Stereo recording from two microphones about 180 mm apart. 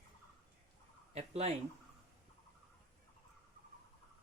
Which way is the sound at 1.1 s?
35° right (ahead or behind).